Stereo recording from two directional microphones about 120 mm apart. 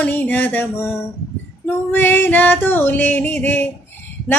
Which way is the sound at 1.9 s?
15° left (ahead or behind).